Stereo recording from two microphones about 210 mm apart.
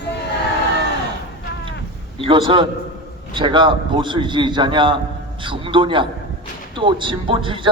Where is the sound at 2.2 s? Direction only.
25° right (ahead or behind).